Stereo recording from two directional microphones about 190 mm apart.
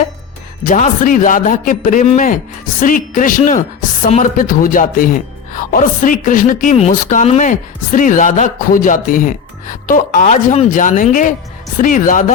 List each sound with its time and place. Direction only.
0.6 s a woman's voice: 45° left (ahead or behind)